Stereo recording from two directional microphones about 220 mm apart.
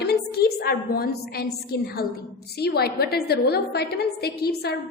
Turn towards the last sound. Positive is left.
turn(degrees=45)  # may be behind; listen again after turning